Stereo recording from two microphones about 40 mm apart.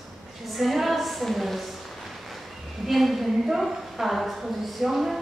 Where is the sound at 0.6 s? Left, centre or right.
Centre.